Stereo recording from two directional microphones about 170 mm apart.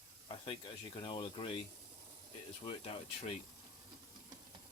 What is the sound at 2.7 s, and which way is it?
Speech, 35° left (ahead or behind).